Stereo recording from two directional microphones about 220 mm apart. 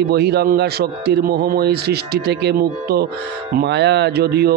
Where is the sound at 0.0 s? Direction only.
50° right (ahead or behind).